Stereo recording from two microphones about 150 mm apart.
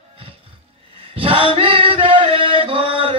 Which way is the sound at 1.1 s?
35° right (ahead or behind).